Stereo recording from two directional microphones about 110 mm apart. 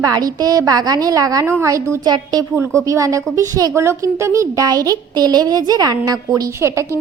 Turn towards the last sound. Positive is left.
turn(degrees=-25)  # may be behind; listen again after turning